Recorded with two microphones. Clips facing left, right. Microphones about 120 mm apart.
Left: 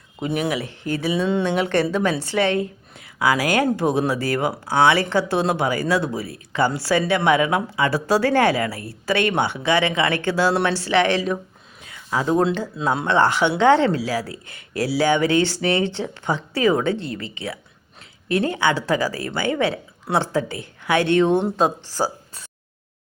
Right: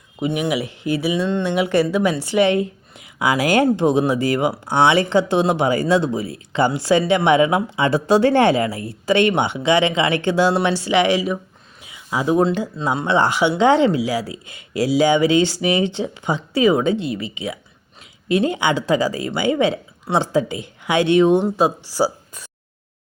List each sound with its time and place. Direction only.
0.3 s speech: 15° right (ahead or behind)
11.8 s a sound: 10° right (ahead or behind)
12.7 s speech: centre (ahead or behind)
13.1 s speech: 15° right (ahead or behind)